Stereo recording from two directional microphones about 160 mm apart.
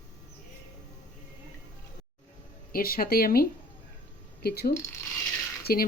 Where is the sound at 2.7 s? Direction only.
65° left (ahead or behind).